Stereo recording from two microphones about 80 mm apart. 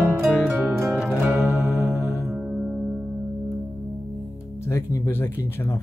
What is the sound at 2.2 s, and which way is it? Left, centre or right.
Music, centre.